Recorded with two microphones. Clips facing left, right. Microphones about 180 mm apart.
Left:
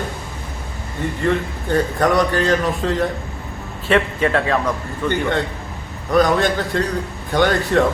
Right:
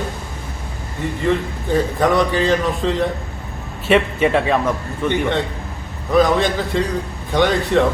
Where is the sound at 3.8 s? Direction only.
20° right (ahead or behind).